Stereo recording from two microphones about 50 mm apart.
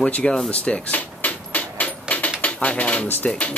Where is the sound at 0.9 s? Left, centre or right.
Left.